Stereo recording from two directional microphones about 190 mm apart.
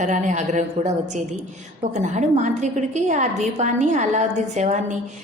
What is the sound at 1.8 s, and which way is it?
A woman's voice, 40° right (ahead or behind).